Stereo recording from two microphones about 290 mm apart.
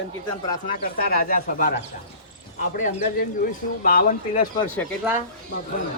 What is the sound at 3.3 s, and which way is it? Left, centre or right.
Speech, left.